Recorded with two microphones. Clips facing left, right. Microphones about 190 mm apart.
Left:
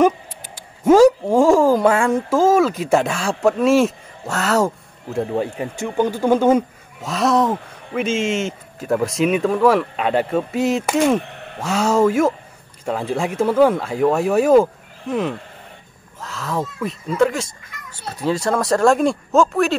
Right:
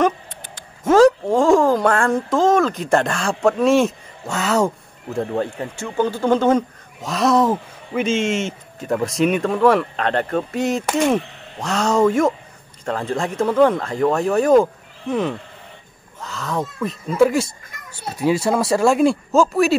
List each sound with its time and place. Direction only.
0.6 s speech: 10° left (ahead or behind)
11.2 s a sound: 55° left (ahead or behind)
11.6 s speech: 5° left (ahead or behind)